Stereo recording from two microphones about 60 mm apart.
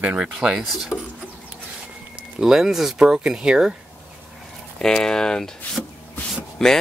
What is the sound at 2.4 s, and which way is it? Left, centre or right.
Speech, centre.